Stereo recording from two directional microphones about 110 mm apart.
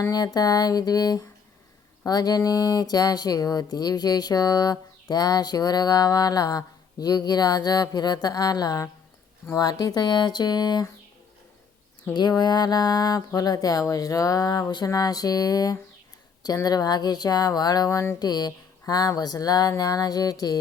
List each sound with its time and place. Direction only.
0.0 s speech: 35° left (ahead or behind)
12.1 s speech: 40° left (ahead or behind)
18.2 s speech: 40° left (ahead or behind)